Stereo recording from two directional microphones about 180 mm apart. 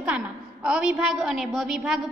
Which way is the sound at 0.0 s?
5° right (ahead or behind).